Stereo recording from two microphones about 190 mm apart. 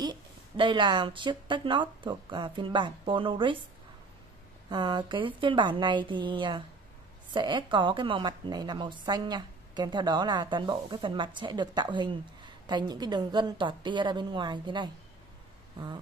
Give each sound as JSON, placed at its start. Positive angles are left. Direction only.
{"t": 0.0, "sound": "a woman's voice", "side_deg": -25}
{"t": 4.6, "sound": "a woman's voice", "side_deg": -25}